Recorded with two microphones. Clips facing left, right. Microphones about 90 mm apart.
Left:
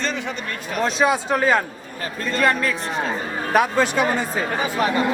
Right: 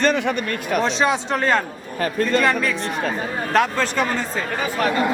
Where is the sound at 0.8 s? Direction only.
5° left (ahead or behind).